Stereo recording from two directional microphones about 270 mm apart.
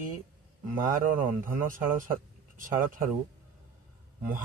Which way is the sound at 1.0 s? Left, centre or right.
Right.